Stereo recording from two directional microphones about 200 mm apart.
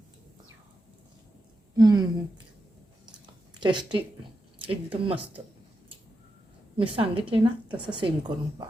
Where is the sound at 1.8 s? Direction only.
20° right (ahead or behind).